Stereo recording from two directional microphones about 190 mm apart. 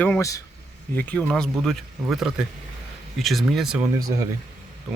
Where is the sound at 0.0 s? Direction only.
15° left (ahead or behind); by 3.8 s 5° right (ahead or behind).